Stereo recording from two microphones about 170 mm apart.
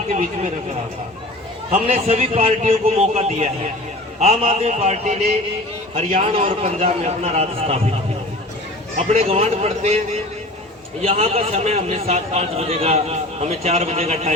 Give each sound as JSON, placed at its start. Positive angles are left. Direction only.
{"t": 0.1, "sound": "a man's voice", "side_deg": -40}
{"t": 1.7, "sound": "a man's voice", "side_deg": -40}
{"t": 6.3, "sound": "a man's voice", "side_deg": -35}
{"t": 9.1, "sound": "a man's voice", "side_deg": -40}
{"t": 11.0, "sound": "a man's voice", "side_deg": -35}